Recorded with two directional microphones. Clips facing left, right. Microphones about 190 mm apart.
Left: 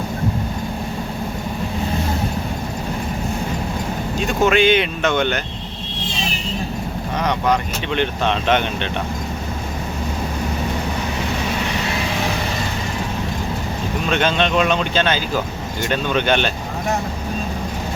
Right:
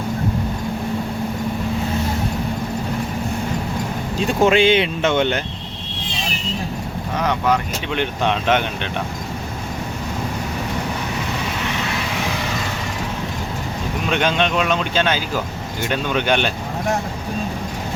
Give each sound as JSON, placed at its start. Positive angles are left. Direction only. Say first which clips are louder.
{"t": 4.3, "sound": "speech", "louder": "right 1 dB", "side_deg": -30}
{"t": 7.2, "sound": "speech", "louder": "even", "side_deg": -5}
{"t": 14.1, "sound": "speech", "louder": "left 1 dB", "side_deg": -10}